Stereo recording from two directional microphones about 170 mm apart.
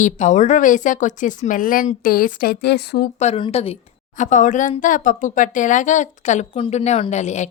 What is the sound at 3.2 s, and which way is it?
A woman's voice, 40° left (ahead or behind).